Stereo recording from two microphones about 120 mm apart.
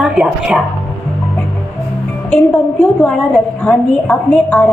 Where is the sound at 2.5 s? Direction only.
15° left (ahead or behind).